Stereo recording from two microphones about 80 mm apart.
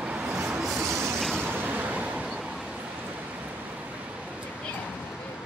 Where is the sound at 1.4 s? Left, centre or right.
Right.